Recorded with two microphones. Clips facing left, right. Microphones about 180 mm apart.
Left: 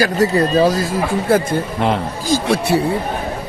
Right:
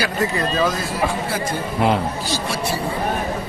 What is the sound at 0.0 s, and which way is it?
Speech, 40° left (ahead or behind).